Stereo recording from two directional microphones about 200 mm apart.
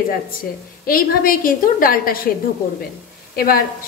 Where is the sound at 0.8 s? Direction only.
45° left (ahead or behind).